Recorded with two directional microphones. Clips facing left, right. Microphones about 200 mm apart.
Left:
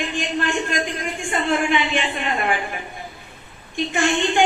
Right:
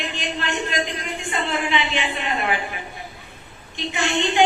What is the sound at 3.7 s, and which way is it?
Speech, 50° left (ahead or behind).